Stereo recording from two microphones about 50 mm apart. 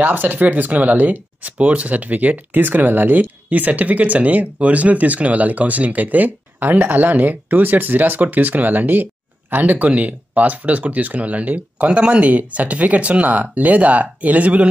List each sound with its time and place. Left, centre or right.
0.0 s speech: right